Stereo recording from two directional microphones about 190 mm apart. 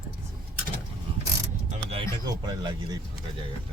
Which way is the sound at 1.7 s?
30° right (ahead or behind).